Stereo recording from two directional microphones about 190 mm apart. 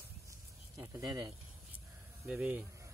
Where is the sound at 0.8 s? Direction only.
20° right (ahead or behind).